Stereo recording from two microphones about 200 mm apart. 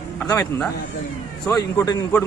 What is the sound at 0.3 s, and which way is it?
Speech, 5° left (ahead or behind).